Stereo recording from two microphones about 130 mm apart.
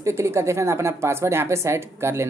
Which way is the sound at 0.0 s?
20° right (ahead or behind).